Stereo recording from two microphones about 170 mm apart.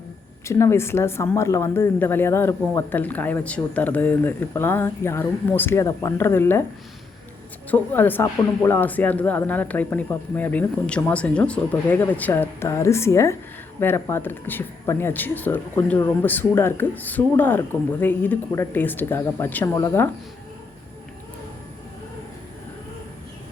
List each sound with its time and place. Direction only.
0.4 s speech: 15° left (ahead or behind)
7.7 s speech: 10° left (ahead or behind)